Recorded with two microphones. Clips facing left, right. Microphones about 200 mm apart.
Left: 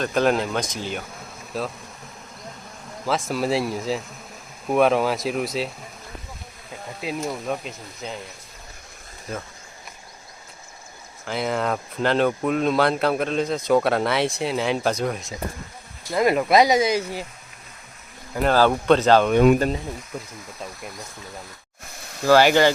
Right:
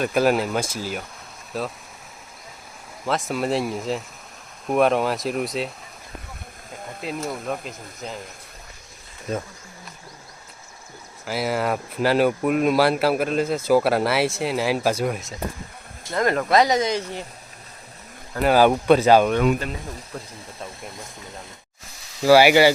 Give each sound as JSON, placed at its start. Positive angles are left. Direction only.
{"t": 0.0, "sound": "speech", "side_deg": -10}
{"t": 3.1, "sound": "speech", "side_deg": 0}
{"t": 7.0, "sound": "speech", "side_deg": 0}
{"t": 11.3, "sound": "speech", "side_deg": -5}
{"t": 16.1, "sound": "speech", "side_deg": 10}
{"t": 18.5, "sound": "speech", "side_deg": -15}
{"t": 19.5, "sound": "speech", "side_deg": 45}
{"t": 22.2, "sound": "speech", "side_deg": -10}